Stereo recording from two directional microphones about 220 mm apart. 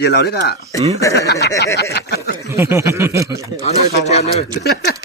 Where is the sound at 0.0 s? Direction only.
45° left (ahead or behind).